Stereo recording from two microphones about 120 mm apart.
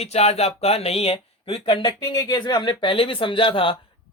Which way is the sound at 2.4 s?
40° left (ahead or behind).